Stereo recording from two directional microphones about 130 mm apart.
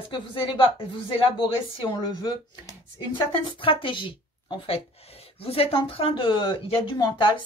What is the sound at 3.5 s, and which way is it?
Speech, 40° left (ahead or behind).